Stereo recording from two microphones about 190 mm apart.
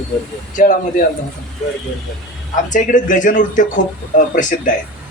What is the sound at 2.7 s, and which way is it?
A man's voice, 40° left (ahead or behind).